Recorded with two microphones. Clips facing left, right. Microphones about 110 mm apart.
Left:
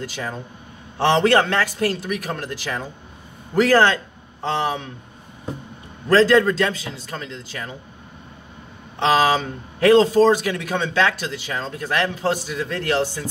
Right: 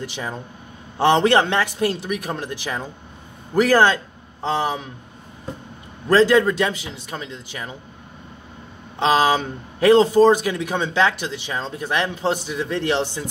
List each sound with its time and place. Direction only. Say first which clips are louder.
0.0 s a man's voice: even; 15° right (ahead or behind)
6.0 s a man's voice: even; 15° right (ahead or behind)
9.1 s a man's voice: even; 15° right (ahead or behind)